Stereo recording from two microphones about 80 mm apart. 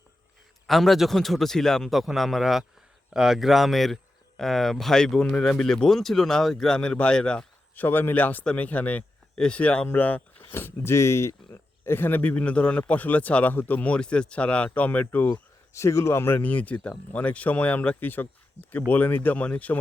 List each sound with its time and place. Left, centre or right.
0.7 s speech: centre
7.8 s speech: left
10.5 s speech: left
15.7 s speech: left
16.4 s speech: centre